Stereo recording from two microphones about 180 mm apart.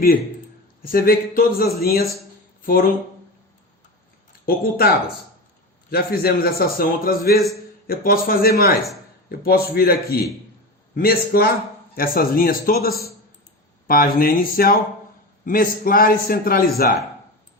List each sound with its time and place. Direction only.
0.8 s a man's voice: 55° left (ahead or behind)
4.3 s speech: 55° left (ahead or behind)
5.9 s a man's voice: 55° left (ahead or behind)